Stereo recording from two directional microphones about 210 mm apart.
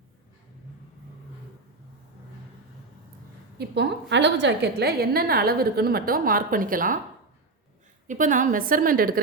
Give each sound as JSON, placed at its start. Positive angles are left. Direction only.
{"t": 3.6, "sound": "a woman's voice", "side_deg": -55}
{"t": 8.0, "sound": "a woman's voice", "side_deg": -35}